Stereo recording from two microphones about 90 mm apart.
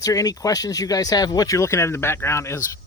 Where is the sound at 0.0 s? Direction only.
40° left (ahead or behind).